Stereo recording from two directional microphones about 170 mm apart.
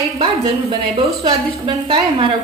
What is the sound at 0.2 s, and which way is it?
A woman's voice, 35° right (ahead or behind).